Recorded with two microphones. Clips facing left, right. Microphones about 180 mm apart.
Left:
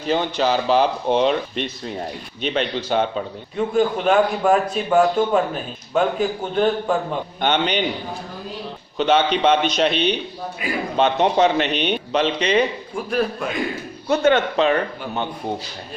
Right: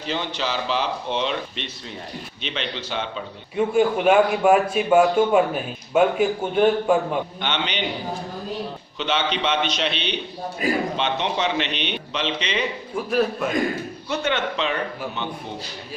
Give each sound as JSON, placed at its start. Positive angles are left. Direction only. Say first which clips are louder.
{"t": 0.0, "sound": "a man's voice", "louder": "left 7 dB", "side_deg": 45}
{"t": 3.6, "sound": "a man's voice", "louder": "even", "side_deg": -10}
{"t": 7.4, "sound": "a man's voice", "louder": "left 6 dB", "side_deg": 45}
{"t": 9.0, "sound": "a man's voice", "louder": "left 7 dB", "side_deg": 45}
{"t": 10.6, "sound": "a man's voice", "louder": "right 5 dB", "side_deg": -40}
{"t": 10.9, "sound": "a man's voice", "louder": "left 7 dB", "side_deg": 45}
{"t": 13.1, "sound": "a man's voice", "louder": "right 1 dB", "side_deg": 0}
{"t": 14.1, "sound": "a man's voice", "louder": "left 8 dB", "side_deg": 45}